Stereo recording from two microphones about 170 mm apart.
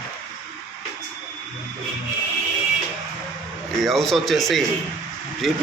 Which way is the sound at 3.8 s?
Centre (ahead or behind).